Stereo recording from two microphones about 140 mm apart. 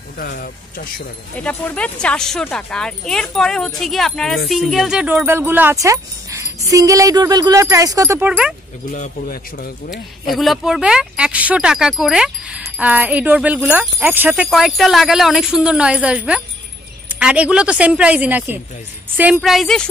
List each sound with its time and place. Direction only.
0.2 s speech: 90° left
1.3 s speech: 10° left (ahead or behind); by 8.3 s 20° right (ahead or behind)
8.3 s speech: 10° right (ahead or behind)
8.9 s a man's voice: 75° left (ahead or behind)
10.3 s speech: centre (ahead or behind)
14.5 s speech: centre (ahead or behind)
19.4 s speech: centre (ahead or behind)